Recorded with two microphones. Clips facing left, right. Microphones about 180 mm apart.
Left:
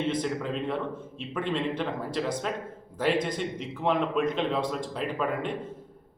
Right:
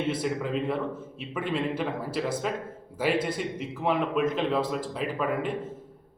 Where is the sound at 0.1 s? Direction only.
5° right (ahead or behind).